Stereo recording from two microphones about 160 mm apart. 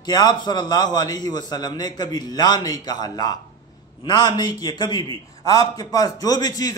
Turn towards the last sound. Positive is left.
turn(degrees=25)  # may be behind; listen again after turning